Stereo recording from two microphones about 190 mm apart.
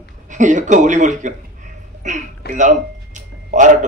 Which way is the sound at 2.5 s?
40° right (ahead or behind).